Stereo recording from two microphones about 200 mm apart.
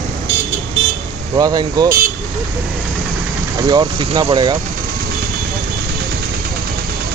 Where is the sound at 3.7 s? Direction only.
20° right (ahead or behind).